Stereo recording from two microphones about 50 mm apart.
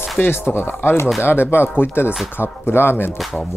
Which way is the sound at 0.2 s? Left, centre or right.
Left.